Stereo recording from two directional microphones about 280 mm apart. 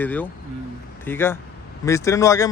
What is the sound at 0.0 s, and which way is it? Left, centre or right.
Speech, centre.